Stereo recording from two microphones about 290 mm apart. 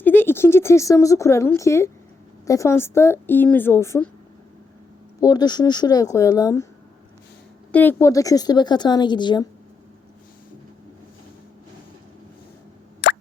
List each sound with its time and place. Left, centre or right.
0.0 s speech: centre
5.2 s speech: centre
7.7 s speech: centre
13.0 s plop: left